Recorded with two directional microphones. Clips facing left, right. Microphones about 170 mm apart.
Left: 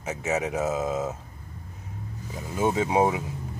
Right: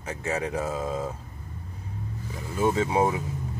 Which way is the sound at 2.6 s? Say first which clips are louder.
Left 1 dB; 15° left (ahead or behind).